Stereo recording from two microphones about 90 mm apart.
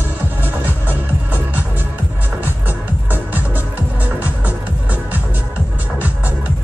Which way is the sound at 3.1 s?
20° right (ahead or behind).